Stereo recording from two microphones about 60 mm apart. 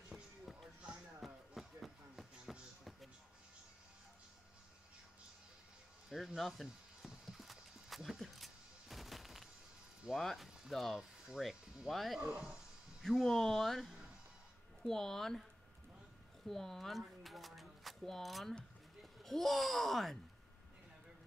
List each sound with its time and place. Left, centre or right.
0.1 s music: centre
1.2 s a sound: centre
6.1 s horse: centre
10.1 s speech: centre
11.0 s music: centre
11.9 s speech: centre
12.2 s speech: centre
13.0 s speech: centre
16.4 s a sound: centre
19.2 s speech: centre